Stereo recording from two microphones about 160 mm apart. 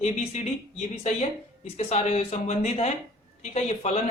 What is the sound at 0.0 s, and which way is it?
A woman's voice, 40° left (ahead or behind).